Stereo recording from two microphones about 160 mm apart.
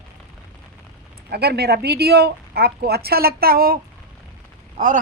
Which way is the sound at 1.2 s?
85° right.